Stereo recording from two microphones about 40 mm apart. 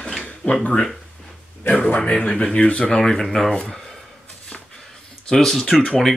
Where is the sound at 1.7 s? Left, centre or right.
Left.